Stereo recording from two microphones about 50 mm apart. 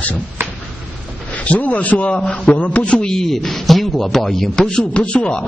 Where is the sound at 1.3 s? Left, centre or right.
Left; by 4.7 s centre.